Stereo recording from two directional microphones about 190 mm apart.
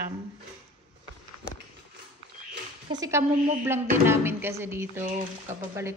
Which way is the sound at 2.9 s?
20° right (ahead or behind).